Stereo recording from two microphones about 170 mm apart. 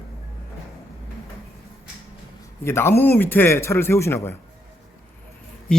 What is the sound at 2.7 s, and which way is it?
Speech, 15° left (ahead or behind).